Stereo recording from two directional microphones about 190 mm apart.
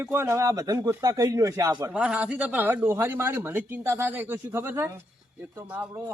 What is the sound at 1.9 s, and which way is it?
Speech, 5° right (ahead or behind).